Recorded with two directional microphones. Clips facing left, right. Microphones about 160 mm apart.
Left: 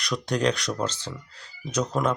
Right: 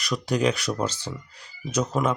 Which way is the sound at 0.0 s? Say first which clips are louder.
Right 1 dB; 5° right (ahead or behind).